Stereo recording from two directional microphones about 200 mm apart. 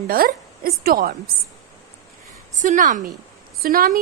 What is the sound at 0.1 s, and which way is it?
A woman's voice, 45° right (ahead or behind).